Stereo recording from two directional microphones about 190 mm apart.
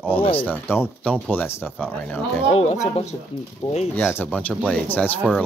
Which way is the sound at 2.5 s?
35° left (ahead or behind).